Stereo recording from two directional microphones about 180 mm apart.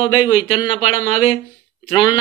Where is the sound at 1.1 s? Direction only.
50° right (ahead or behind).